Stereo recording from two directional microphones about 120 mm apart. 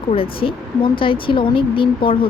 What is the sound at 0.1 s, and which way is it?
Speech, 50° left (ahead or behind).